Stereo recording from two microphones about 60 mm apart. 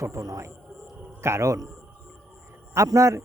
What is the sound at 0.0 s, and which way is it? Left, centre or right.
Speech, right.